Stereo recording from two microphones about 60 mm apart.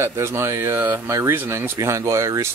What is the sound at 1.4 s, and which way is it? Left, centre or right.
Speech, right.